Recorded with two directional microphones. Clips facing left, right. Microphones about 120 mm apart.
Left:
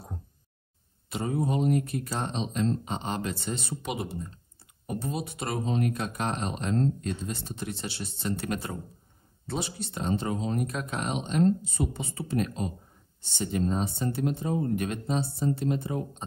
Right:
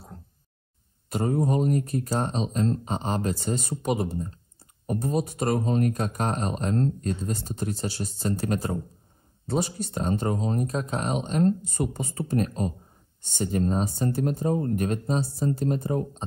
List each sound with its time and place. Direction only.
1.0 s speech: 50° right (ahead or behind)
9.5 s speech: 45° right (ahead or behind)